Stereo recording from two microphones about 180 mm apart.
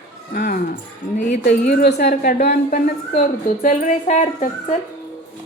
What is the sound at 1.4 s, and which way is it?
A woman's voice, 60° left (ahead or behind).